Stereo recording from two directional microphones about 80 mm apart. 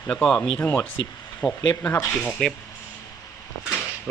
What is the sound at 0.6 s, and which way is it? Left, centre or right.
Speech, left.